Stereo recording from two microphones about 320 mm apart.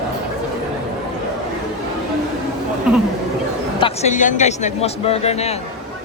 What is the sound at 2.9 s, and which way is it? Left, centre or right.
Chatter, centre.